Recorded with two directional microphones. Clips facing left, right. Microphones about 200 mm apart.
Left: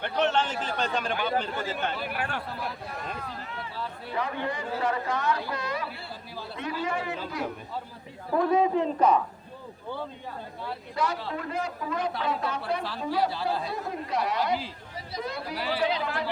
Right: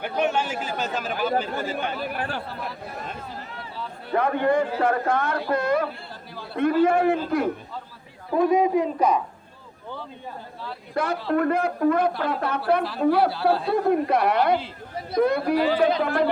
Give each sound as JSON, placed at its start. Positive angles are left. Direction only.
{"t": 0.2, "sound": "a man's voice", "side_deg": -10}
{"t": 2.1, "sound": "speech", "side_deg": -35}
{"t": 2.6, "sound": "speech", "side_deg": 0}
{"t": 4.1, "sound": "a man's voice", "side_deg": -55}
{"t": 8.4, "sound": "a man's voice", "side_deg": -15}
{"t": 10.9, "sound": "a man's voice", "side_deg": -55}